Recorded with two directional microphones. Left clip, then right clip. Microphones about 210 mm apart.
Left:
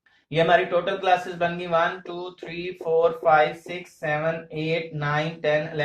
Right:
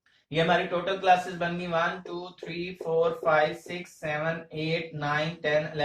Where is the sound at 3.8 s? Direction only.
40° left (ahead or behind).